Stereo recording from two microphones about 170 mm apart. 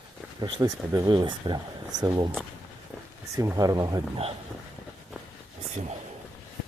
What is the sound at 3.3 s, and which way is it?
Speech, 20° right (ahead or behind).